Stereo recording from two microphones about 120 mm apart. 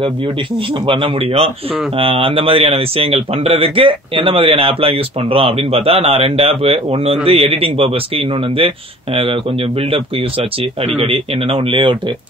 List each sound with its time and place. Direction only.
0.8 s speech: 50° right (ahead or behind)
11.0 s speech: 50° right (ahead or behind)